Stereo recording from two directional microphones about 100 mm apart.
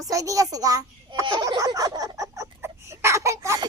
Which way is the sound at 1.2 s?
50° right (ahead or behind).